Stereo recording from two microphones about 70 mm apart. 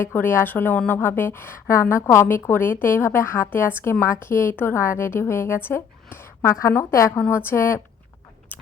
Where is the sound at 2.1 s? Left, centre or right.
Left.